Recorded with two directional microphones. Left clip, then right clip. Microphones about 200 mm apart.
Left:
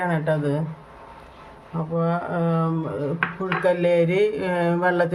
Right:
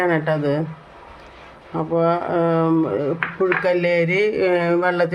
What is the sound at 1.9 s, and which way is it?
Speech, 20° right (ahead or behind).